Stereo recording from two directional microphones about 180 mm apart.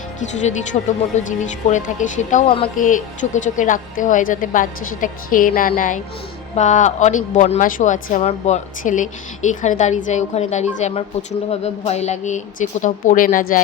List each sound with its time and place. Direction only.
0.2 s a woman's voice: 40° left (ahead or behind)